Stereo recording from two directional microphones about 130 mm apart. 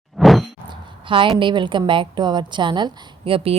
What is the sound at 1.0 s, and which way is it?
A woman's voice, 40° right (ahead or behind).